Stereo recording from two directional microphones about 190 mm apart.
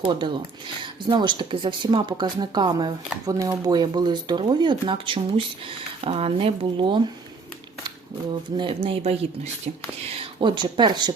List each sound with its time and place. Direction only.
0.0 s speech: 25° right (ahead or behind)
8.5 s speech: 25° right (ahead or behind)